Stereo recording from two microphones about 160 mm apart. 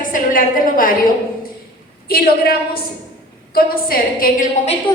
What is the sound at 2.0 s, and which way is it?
A woman's voice, 70° left (ahead or behind).